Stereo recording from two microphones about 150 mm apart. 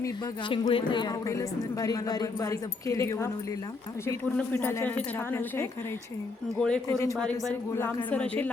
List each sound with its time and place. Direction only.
0.4 s a man's voice: 35° left (ahead or behind); by 8.4 s 10° left (ahead or behind)